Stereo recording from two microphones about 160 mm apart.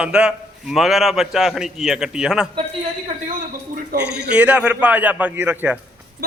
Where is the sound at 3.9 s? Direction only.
90° right.